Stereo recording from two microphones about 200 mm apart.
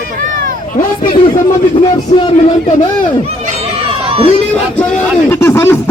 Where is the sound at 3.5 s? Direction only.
30° right (ahead or behind).